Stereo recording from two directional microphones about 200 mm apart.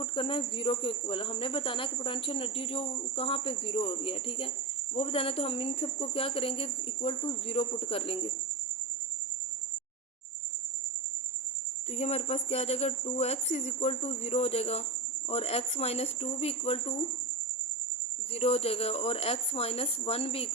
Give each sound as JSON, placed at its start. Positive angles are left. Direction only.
{"t": 0.0, "sound": "speech", "side_deg": 25}
{"t": 11.9, "sound": "speech", "side_deg": 30}
{"t": 18.3, "sound": "speech", "side_deg": 30}